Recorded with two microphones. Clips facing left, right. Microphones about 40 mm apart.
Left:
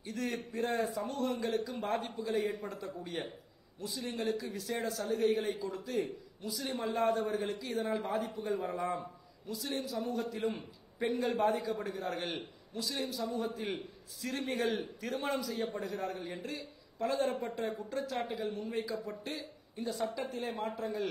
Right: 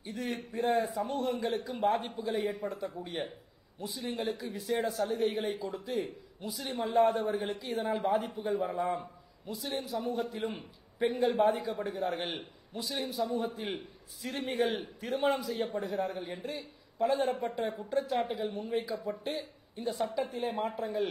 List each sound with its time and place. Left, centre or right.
0.0 s a man's voice: centre
5.6 s a man's voice: centre
10.1 s a man's voice: centre
15.5 s a man's voice: centre
15.8 s a man's voice: centre
17.6 s a man's voice: right
18.1 s a man's voice: centre